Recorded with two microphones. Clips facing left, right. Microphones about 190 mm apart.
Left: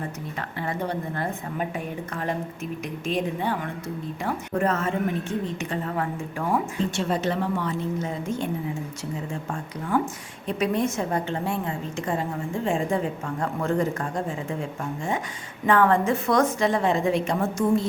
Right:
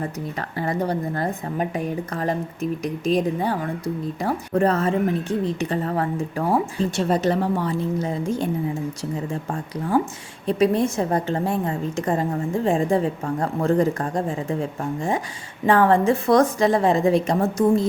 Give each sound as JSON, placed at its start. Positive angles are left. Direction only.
{"t": 0.6, "sound": "a woman's voice", "side_deg": -40}
{"t": 9.9, "sound": "a woman's voice", "side_deg": -30}